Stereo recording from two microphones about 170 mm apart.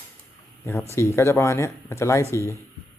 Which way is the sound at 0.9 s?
15° left (ahead or behind).